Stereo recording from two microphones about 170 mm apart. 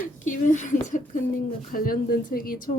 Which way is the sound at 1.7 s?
55° left (ahead or behind).